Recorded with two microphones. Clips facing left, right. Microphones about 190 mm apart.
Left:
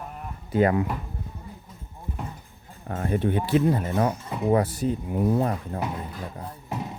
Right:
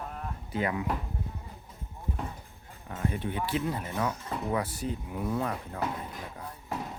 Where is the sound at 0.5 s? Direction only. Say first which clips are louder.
Left 10 dB; 50° left (ahead or behind).